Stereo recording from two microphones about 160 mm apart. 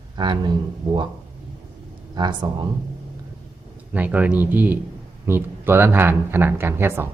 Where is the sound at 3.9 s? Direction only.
10° right (ahead or behind).